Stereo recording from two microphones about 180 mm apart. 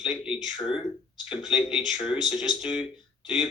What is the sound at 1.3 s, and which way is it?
Speech, 25° left (ahead or behind).